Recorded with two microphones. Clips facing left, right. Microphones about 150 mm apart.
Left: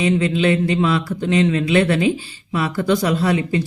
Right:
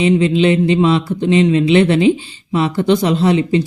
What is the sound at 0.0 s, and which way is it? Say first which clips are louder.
Speech: right 5 dB; 20° right (ahead or behind).